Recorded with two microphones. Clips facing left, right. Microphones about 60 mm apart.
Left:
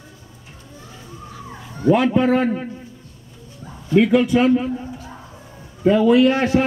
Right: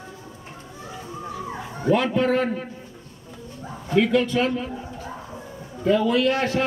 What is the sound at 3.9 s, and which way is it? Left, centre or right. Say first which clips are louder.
Speech: left 5 dB; centre.